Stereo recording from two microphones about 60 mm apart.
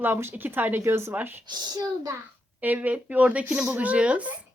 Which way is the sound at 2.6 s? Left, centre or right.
Right.